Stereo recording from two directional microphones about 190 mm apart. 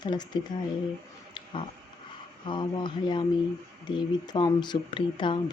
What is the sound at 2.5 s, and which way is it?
Speech, 25° left (ahead or behind).